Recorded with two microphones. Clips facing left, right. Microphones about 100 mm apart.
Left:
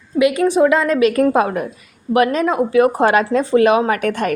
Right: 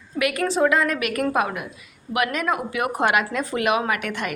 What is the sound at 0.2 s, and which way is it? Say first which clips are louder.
A woman's voice: left 7 dB; 20° left (ahead or behind).